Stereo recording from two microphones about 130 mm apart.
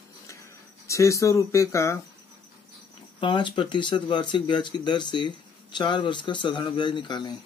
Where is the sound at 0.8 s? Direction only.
25° left (ahead or behind).